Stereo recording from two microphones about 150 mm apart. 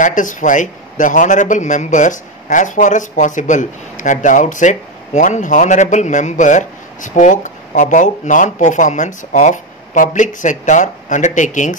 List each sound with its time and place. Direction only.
0.0 s a man's voice: 60° left (ahead or behind)